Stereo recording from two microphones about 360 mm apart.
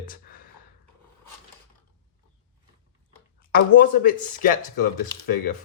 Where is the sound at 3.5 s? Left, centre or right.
Left.